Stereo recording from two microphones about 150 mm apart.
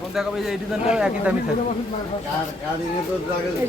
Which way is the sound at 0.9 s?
5° right (ahead or behind).